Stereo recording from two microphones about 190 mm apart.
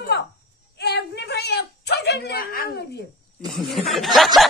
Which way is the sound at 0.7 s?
60° left (ahead or behind).